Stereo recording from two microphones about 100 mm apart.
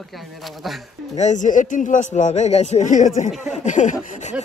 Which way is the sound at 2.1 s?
90° left.